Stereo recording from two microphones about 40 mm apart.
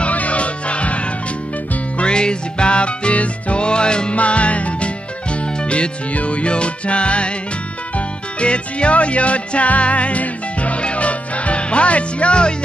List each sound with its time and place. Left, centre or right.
0.0 s music: left
4.2 s music: left
8.4 s music: left